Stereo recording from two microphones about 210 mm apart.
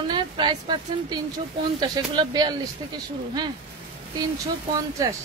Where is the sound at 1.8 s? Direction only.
20° right (ahead or behind).